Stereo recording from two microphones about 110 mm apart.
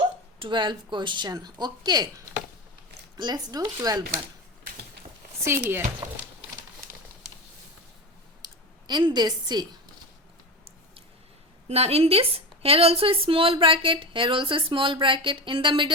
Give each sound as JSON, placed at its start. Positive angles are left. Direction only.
{"t": 0.3, "sound": "speech", "side_deg": -50}
{"t": 3.2, "sound": "speech", "side_deg": -40}
{"t": 5.4, "sound": "speech", "side_deg": -25}
{"t": 8.4, "sound": "clicking", "side_deg": -35}
{"t": 8.9, "sound": "speech", "side_deg": -40}
{"t": 11.7, "sound": "speech", "side_deg": -65}